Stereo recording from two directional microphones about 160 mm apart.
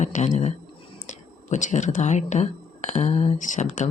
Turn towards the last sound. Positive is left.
turn(degrees=50)  # may be behind; listen again after turning